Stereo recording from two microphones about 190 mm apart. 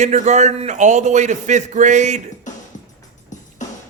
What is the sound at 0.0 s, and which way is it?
A man's voice, 40° right (ahead or behind).